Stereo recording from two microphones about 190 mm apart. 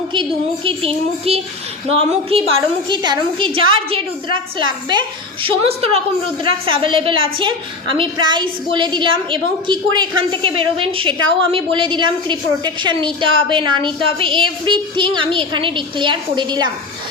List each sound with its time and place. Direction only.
0.1 s a woman's voice: 25° right (ahead or behind)